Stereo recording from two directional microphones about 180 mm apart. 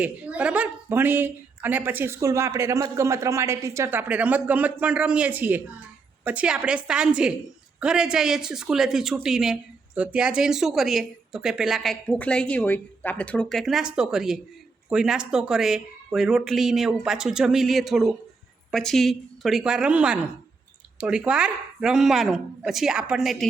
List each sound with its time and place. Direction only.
0.0 s a woman's voice: 5° right (ahead or behind)